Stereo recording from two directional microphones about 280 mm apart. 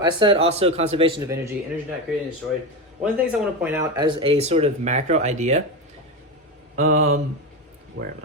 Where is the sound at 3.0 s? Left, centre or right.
Centre; by 5.6 s right.